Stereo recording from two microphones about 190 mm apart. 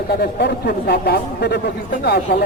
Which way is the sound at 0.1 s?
60° left (ahead or behind).